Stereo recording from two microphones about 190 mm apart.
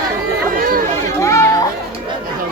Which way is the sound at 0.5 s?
50° right (ahead or behind).